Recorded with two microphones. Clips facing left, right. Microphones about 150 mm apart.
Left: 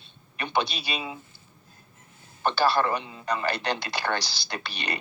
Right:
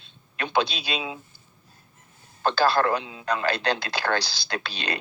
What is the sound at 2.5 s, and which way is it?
Speech, 10° left (ahead or behind).